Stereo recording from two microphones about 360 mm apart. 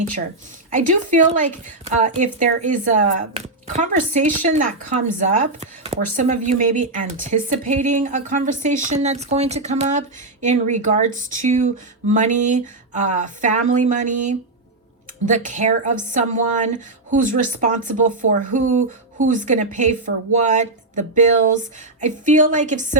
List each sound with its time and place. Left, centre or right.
0.7 s speech: right